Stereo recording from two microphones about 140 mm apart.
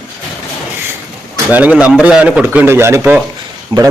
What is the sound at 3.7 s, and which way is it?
Speech, 30° right (ahead or behind).